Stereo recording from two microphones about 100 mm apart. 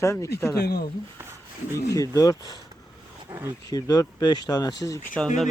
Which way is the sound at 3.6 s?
40° left (ahead or behind).